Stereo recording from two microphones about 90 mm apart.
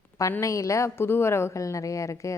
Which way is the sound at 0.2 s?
35° left (ahead or behind).